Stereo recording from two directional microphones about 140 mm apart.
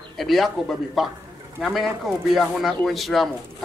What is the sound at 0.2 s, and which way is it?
A man's voice, centre (ahead or behind).